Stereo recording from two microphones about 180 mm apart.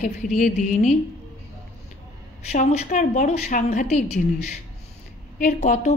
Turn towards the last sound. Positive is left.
turn(degrees=40)  # may be behind; listen again after turning